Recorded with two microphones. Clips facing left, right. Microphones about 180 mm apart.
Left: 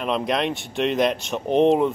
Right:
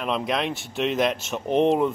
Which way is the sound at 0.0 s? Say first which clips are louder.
Left 2 dB; centre (ahead or behind).